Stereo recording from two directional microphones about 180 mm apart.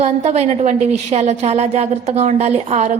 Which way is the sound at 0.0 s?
35° right (ahead or behind).